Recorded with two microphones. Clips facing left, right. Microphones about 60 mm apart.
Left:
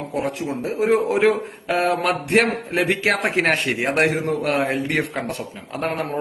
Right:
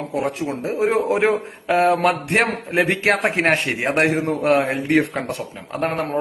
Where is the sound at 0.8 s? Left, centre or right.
Right.